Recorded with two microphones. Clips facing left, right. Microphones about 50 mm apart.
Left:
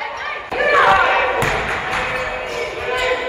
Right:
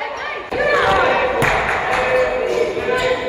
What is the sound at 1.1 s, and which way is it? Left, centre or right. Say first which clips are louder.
Basketball bounce: even; left.